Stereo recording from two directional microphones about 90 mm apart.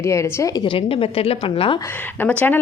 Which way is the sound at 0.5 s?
70° left (ahead or behind).